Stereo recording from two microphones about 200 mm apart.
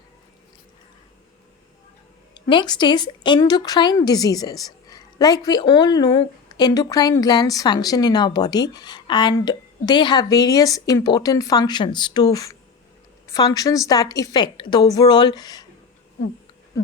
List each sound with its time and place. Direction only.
2.3 s speech: 20° left (ahead or behind)